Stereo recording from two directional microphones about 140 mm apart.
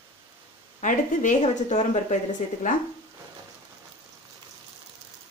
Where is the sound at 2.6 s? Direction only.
70° left (ahead or behind).